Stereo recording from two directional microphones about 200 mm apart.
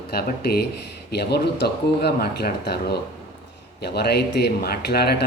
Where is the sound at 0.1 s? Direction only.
50° left (ahead or behind).